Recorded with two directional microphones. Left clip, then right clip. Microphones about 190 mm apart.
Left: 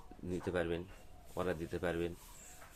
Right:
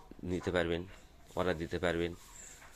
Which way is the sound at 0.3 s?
25° right (ahead or behind).